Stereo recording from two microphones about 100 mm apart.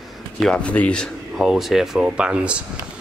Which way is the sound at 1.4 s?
Centre (ahead or behind).